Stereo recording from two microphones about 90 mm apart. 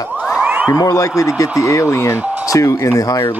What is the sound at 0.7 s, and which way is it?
Speech, 40° left (ahead or behind).